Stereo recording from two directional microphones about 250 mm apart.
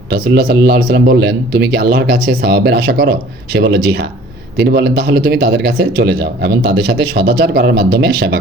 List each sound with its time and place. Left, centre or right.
0.1 s speech: right